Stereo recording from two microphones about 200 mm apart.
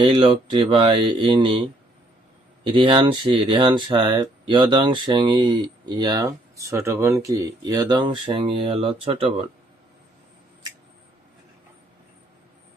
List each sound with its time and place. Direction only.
0.0 s speech: 25° right (ahead or behind)